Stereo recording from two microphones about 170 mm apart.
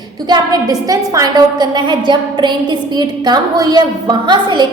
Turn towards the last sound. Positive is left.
turn(degrees=-25)  # may be behind; listen again after turning